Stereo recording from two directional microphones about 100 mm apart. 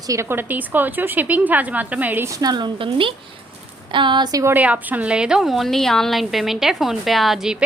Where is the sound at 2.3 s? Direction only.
40° right (ahead or behind).